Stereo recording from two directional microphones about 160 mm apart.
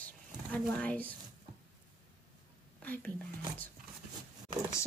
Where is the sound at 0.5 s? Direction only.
10° left (ahead or behind).